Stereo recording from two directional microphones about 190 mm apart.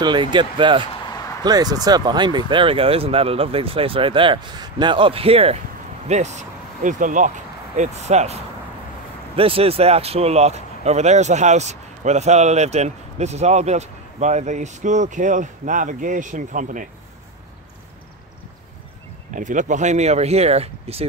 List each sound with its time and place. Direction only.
0.0 s speech: 25° right (ahead or behind)
9.4 s speech: 30° right (ahead or behind)
19.3 s speech: 40° right (ahead or behind)